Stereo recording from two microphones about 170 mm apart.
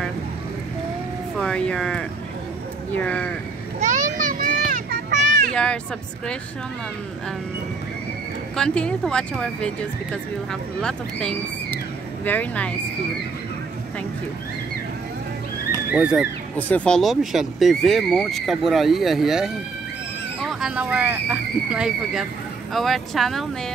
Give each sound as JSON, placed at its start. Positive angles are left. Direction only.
{"t": 1.4, "sound": "speech", "side_deg": 5}
{"t": 3.8, "sound": "children playing", "side_deg": -45}
{"t": 5.5, "sound": "speech", "side_deg": 5}
{"t": 8.5, "sound": "speech", "side_deg": 5}
{"t": 15.7, "sound": "a sound", "side_deg": -10}
{"t": 16.5, "sound": "speech", "side_deg": 10}